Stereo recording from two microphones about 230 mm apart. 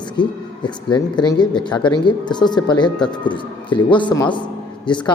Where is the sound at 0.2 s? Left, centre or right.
Centre.